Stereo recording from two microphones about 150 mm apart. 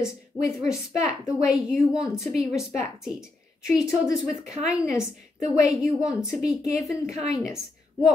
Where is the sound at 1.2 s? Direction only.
5° right (ahead or behind).